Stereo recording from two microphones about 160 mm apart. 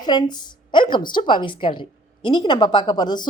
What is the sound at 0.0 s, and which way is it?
A woman's voice, 25° left (ahead or behind).